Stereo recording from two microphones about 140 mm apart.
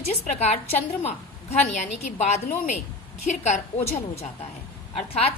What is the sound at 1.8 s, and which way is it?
Speech, 55° left (ahead or behind).